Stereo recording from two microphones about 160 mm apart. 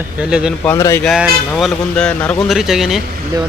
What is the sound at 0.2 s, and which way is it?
Speech, 5° right (ahead or behind).